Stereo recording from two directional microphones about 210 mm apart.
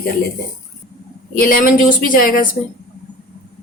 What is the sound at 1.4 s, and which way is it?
A woman's voice, 45° left (ahead or behind).